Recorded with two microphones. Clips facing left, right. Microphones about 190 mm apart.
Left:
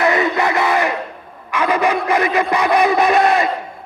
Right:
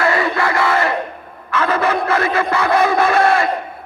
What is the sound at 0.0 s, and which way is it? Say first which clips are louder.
Crowd: left 1 dB; 20° left (ahead or behind).